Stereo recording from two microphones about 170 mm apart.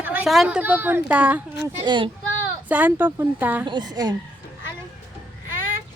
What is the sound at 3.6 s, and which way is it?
Speech, 25° right (ahead or behind).